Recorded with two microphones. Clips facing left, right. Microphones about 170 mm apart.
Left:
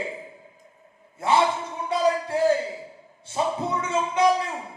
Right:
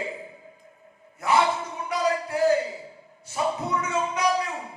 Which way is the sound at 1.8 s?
25° left (ahead or behind).